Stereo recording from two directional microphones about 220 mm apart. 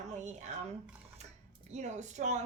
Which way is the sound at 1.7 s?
30° right (ahead or behind).